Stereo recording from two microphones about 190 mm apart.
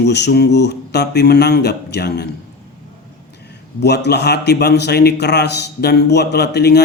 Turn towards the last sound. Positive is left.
turn(degrees=60)  # may be behind; listen again after turning